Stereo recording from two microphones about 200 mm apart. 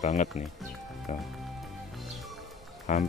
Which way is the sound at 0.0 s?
35° left (ahead or behind).